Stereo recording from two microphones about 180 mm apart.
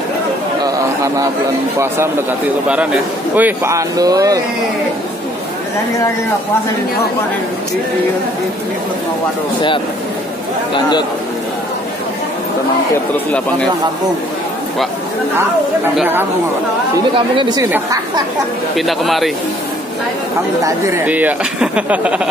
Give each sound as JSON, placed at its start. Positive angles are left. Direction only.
{"t": 0.7, "sound": "a sound", "side_deg": -20}
{"t": 1.8, "sound": "speech", "side_deg": -10}
{"t": 16.0, "sound": "speech", "side_deg": -10}
{"t": 17.4, "sound": "a woman's voice", "side_deg": -25}
{"t": 17.6, "sound": "speech", "side_deg": -10}
{"t": 18.8, "sound": "speech", "side_deg": 0}
{"t": 20.6, "sound": "speech", "side_deg": -15}